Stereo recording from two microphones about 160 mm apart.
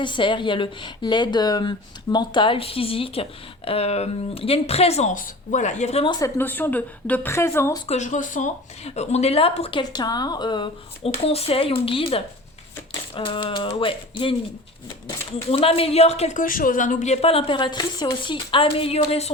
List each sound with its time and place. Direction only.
0.0 s speech: 30° left (ahead or behind)
6.1 s a woman's voice: 20° left (ahead or behind)
7.9 s speech: 50° left (ahead or behind); by 14.3 s 35° left (ahead or behind)
15.4 s speech: 35° left (ahead or behind)